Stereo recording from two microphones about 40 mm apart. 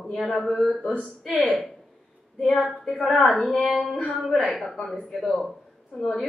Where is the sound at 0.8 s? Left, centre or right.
Left.